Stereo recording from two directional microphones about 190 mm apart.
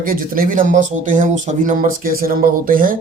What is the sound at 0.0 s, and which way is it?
Speech, 45° right (ahead or behind).